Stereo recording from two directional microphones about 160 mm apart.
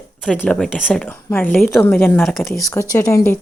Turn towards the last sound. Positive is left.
turn(degrees=15)  # may be behind; listen again after turning